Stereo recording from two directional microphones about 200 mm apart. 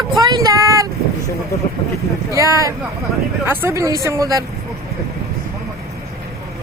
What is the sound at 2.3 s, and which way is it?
Speech, 15° right (ahead or behind).